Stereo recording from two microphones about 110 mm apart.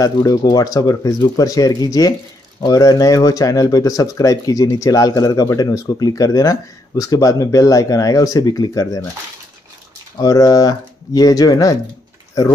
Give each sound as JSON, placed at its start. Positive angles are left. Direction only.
{"t": 0.0, "sound": "speech", "side_deg": 35}
{"t": 10.1, "sound": "speech", "side_deg": 35}